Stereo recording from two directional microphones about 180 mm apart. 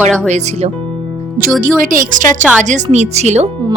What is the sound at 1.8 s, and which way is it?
A woman's voice, 50° right (ahead or behind).